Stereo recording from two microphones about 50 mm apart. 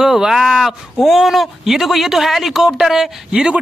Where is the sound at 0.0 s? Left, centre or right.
Centre.